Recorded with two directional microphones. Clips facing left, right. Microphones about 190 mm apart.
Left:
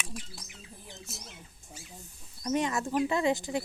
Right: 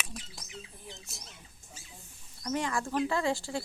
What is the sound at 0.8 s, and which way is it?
Squawk, centre (ahead or behind).